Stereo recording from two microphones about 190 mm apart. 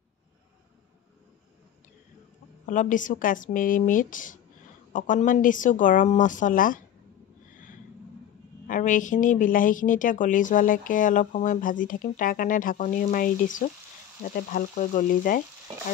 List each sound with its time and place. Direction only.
2.6 s a woman's voice: 40° left (ahead or behind)
8.6 s a woman's voice: 45° left (ahead or behind)